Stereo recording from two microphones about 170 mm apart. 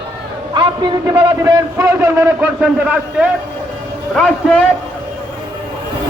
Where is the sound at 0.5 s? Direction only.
30° right (ahead or behind); by 3.2 s 10° right (ahead or behind).